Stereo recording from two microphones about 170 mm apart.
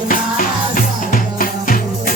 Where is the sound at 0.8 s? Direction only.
55° left (ahead or behind).